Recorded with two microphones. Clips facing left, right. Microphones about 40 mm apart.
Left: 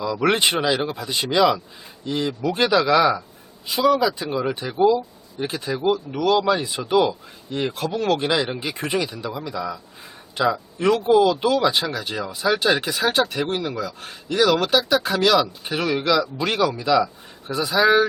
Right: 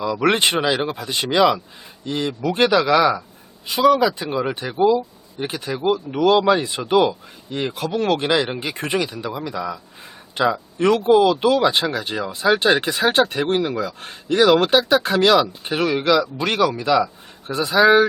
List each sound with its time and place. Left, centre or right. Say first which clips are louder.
0.0 s speech: right 2 dB; centre
2.5 s speech: right 2 dB; centre
8.5 s speech: right 2 dB; centre
12.3 s speech: right 3 dB; right; by 16.0 s centre
16.0 s speech: right 2 dB; right
16.5 s speech: right 3 dB; centre
16.7 s speech: right 1 dB; right